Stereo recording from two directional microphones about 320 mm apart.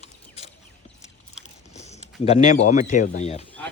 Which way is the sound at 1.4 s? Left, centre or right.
Left.